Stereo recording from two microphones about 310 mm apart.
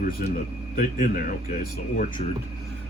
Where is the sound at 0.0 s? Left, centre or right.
Left.